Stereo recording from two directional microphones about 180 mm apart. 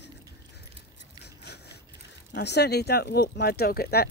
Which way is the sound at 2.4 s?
70° left (ahead or behind).